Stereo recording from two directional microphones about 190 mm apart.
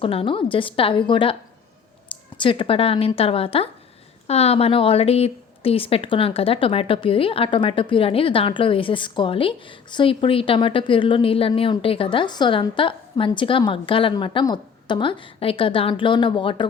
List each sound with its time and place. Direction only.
0.0 s a woman's voice: 30° left (ahead or behind)